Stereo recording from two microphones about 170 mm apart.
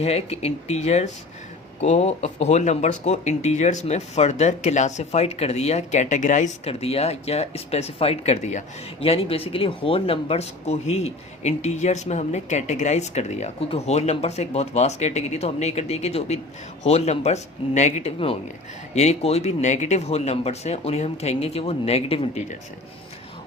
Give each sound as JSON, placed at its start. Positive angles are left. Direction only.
{"t": 0.0, "sound": "speech", "side_deg": 35}